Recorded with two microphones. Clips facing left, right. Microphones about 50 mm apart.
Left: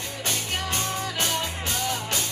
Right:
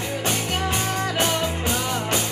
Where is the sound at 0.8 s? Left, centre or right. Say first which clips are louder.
Right 5 dB; right.